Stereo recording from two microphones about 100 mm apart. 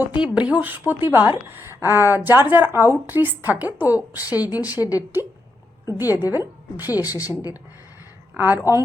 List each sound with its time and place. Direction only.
0.0 s a woman's voice: 15° right (ahead or behind)
4.8 s a woman's voice: 40° left (ahead or behind)
6.1 s a woman's voice: 20° right (ahead or behind)
7.1 s a woman's voice: 35° left (ahead or behind)
8.4 s a woman's voice: 20° right (ahead or behind)